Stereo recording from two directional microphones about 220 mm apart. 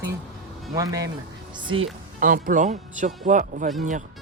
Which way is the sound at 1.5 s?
25° right (ahead or behind).